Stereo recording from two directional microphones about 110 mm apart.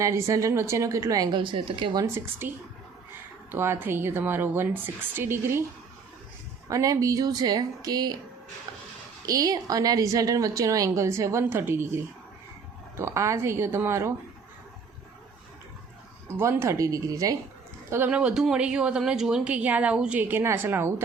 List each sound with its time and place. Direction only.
0.0 s a woman's voice: 25° right (ahead or behind); by 2.0 s 50° right (ahead or behind)
2.4 s a woman's voice: 20° right (ahead or behind)
6.7 s speech: 30° right (ahead or behind)
9.2 s a woman's voice: 35° right (ahead or behind)
13.0 s a woman's voice: 25° right (ahead or behind)
16.4 s a woman's voice: 25° right (ahead or behind)
17.9 s a woman's voice: 15° right (ahead or behind)